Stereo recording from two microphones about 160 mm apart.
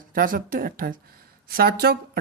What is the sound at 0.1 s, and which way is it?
Speech, 60° right (ahead or behind).